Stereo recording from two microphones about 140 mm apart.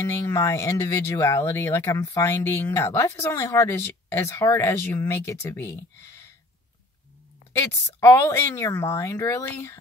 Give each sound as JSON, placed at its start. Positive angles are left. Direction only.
{"t": 0.0, "sound": "speech", "side_deg": 20}
{"t": 7.5, "sound": "speech", "side_deg": 20}